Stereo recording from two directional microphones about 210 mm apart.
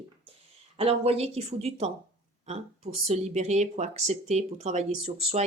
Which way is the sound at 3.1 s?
30° right (ahead or behind).